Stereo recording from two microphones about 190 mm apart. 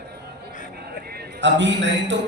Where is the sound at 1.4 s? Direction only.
70° right (ahead or behind).